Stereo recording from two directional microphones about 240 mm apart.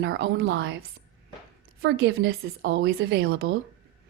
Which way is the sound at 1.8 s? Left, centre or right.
Right.